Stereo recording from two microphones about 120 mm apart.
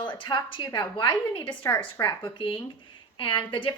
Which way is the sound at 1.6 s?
25° left (ahead or behind).